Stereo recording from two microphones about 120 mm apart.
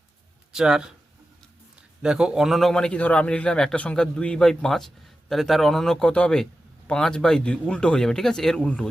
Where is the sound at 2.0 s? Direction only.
5° right (ahead or behind).